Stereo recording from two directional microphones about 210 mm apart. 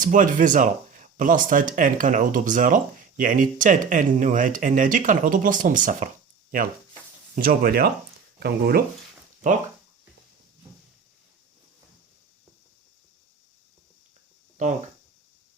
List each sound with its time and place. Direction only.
0.0 s speech: 40° right (ahead or behind)
7.3 s speech: 45° right (ahead or behind)
9.4 s speech: 35° right (ahead or behind)